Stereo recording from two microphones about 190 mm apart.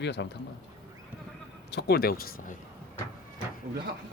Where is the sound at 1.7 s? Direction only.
55° left (ahead or behind).